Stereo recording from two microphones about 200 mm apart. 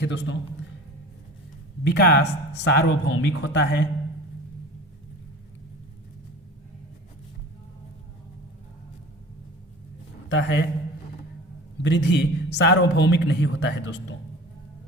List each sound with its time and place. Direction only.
0.0 s a man's voice: 65° left (ahead or behind)
1.8 s a man's voice: 55° left (ahead or behind)
10.2 s a man's voice: 65° left (ahead or behind)
11.8 s a man's voice: 60° left (ahead or behind)